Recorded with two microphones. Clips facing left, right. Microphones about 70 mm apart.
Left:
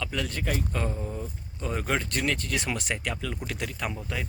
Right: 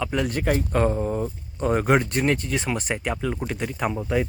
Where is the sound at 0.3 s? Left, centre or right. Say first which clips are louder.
Right 10 dB; right.